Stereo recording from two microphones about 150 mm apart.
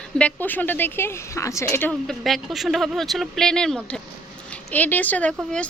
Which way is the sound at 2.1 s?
Centre (ahead or behind).